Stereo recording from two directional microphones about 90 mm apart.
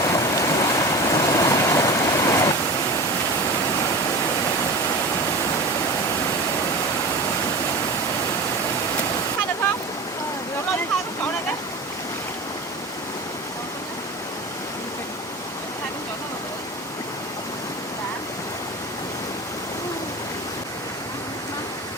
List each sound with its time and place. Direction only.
0.0 s waves: 40° left (ahead or behind)